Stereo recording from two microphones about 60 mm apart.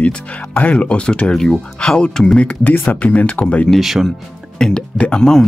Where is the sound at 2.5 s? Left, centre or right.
Left.